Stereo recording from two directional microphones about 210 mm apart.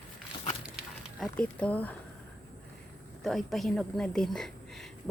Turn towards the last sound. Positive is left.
turn(degrees=0)  # may be behind; listen again after turning